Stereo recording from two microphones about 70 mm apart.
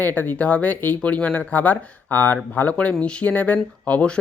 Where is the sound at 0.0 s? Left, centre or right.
Left.